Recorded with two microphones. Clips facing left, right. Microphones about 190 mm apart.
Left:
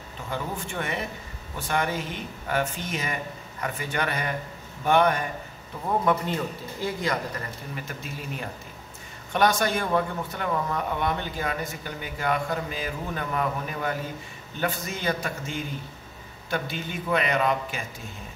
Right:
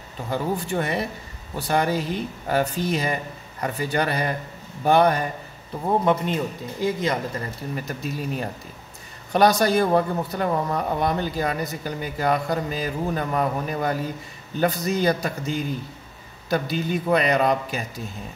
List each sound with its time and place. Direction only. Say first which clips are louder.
0.3 s speech: right 7 dB; 35° right (ahead or behind)
5.9 s a man's voice: right 3 dB; 20° right (ahead or behind)
7.7 s speech: right 7 dB; 40° right (ahead or behind)